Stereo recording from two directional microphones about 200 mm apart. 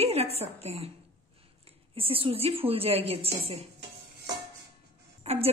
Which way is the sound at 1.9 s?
25° right (ahead or behind).